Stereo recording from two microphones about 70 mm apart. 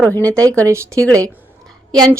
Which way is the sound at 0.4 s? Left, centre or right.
Right.